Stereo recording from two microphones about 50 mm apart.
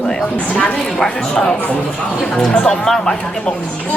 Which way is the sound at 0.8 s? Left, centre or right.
Centre.